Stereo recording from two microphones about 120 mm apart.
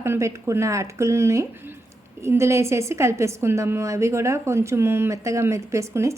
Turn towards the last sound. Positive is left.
turn(degrees=-25)  # may be behind; listen again after turning